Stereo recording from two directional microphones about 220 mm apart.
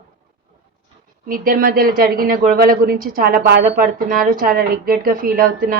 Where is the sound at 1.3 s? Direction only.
40° right (ahead or behind).